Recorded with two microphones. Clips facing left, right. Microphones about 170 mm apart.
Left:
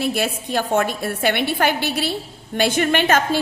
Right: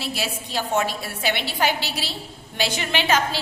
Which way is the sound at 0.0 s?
55° left (ahead or behind).